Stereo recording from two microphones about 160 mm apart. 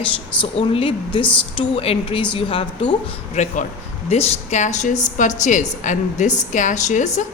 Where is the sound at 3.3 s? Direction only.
50° left (ahead or behind).